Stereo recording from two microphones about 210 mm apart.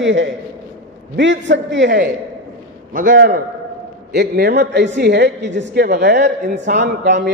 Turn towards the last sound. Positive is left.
turn(degrees=-55)  # may be behind; listen again after turning